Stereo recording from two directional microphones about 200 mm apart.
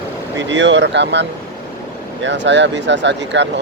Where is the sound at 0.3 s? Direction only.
65° right (ahead or behind).